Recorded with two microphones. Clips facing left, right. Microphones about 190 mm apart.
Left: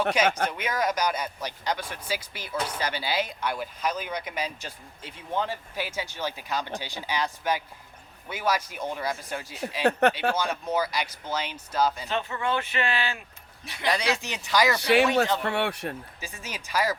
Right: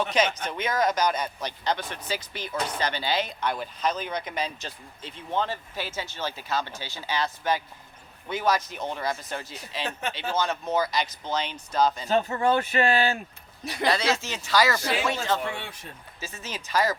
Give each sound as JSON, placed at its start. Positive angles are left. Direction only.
{"t": 0.3, "sound": "speech", "side_deg": 60}
{"t": 0.5, "sound": "speech", "side_deg": 10}
{"t": 12.0, "sound": "speech", "side_deg": -40}
{"t": 13.8, "sound": "speech", "side_deg": 15}
{"t": 14.8, "sound": "speech", "side_deg": 70}
{"t": 16.2, "sound": "speech", "side_deg": 15}